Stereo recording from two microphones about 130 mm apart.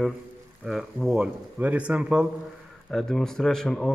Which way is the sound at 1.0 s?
5° right (ahead or behind).